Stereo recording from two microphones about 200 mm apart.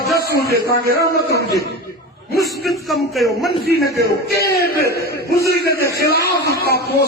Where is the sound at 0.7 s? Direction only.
50° right (ahead or behind).